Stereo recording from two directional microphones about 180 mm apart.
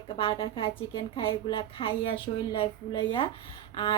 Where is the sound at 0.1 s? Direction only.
30° left (ahead or behind).